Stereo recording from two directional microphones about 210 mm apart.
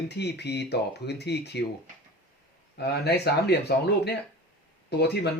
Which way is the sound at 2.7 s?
50° left (ahead or behind).